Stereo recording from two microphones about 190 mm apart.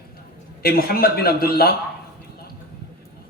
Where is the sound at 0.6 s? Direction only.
55° left (ahead or behind).